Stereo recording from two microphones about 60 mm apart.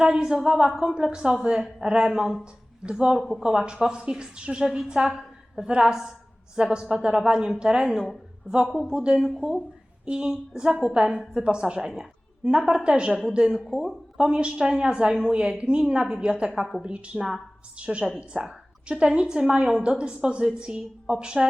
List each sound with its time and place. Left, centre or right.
0.0 s a woman's voice: centre
3.2 s speech: centre
3.4 s a woman's voice: centre
13.7 s speech: centre
14.2 s a woman's voice: centre